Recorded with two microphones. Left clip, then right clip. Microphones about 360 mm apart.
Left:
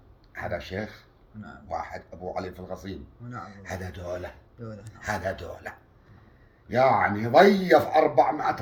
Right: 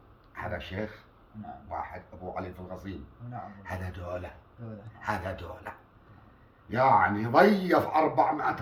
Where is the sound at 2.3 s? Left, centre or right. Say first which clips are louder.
Left 4 dB; right.